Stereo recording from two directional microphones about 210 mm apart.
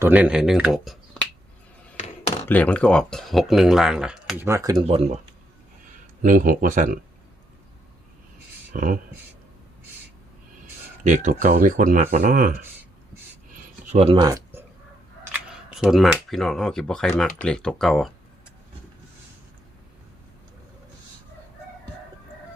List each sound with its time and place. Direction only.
0.0 s speech: 5° right (ahead or behind)
2.0 s a sound: 30° left (ahead or behind)
2.4 s speech: 10° left (ahead or behind); by 4.9 s 15° right (ahead or behind)
4.9 s speech: 30° right (ahead or behind)
6.2 s speech: 40° right (ahead or behind)
8.7 s speech: 40° right (ahead or behind)
11.0 s speech: 35° right (ahead or behind)
13.9 s speech: 30° right (ahead or behind)
14.2 s speech: 15° right (ahead or behind)
15.2 s camera: 5° right (ahead or behind)
16.1 s speech: centre (ahead or behind)